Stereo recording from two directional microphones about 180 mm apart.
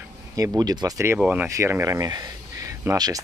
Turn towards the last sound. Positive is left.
turn(degrees=-20)  # may be behind; listen again after turning